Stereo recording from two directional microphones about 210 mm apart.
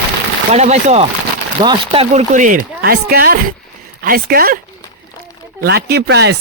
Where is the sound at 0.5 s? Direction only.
30° right (ahead or behind).